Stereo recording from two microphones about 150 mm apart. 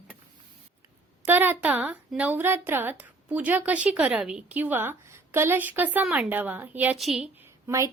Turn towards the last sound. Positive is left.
turn(degrees=-20)  # may be behind; listen again after turning